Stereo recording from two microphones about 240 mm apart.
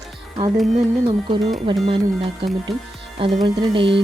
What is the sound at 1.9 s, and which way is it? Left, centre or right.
A woman's voice, right.